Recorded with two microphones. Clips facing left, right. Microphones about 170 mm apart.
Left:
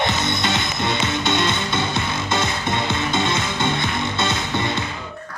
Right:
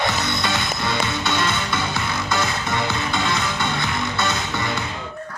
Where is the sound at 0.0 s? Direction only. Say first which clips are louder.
Left 1 dB; 20° left (ahead or behind).